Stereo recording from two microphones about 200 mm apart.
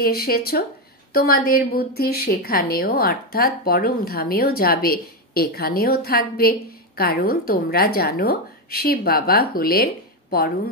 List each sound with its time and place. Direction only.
0.0 s a woman's voice: 50° left (ahead or behind)